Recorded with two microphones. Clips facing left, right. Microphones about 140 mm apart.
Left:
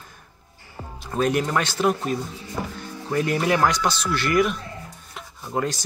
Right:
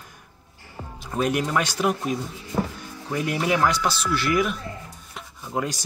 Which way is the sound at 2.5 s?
50° right (ahead or behind).